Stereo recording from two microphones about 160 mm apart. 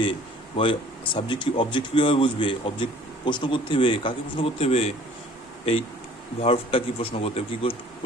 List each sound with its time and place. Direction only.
0.0 s speech: 35° left (ahead or behind)
6.4 s speech: 35° left (ahead or behind)